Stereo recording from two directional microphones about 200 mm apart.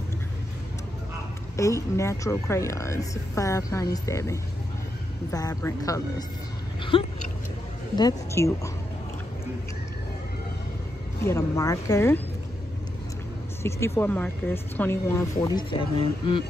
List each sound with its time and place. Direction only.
1.6 s speech: 15° left (ahead or behind)
11.2 s speech: 15° left (ahead or behind)
13.6 s speech: 15° left (ahead or behind)